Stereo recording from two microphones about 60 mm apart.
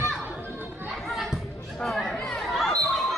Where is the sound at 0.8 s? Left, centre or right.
Centre.